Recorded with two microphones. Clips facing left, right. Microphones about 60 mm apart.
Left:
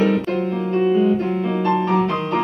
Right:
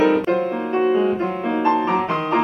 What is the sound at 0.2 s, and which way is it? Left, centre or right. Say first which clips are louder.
Music: right 2 dB; centre.